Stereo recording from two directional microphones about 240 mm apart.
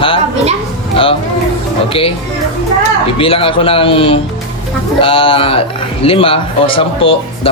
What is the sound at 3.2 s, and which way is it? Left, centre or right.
A man's voice, left.